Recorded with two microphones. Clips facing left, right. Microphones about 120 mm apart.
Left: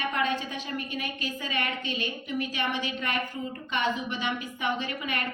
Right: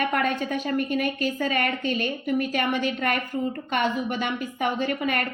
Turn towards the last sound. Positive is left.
turn(degrees=-50)  # may be behind; listen again after turning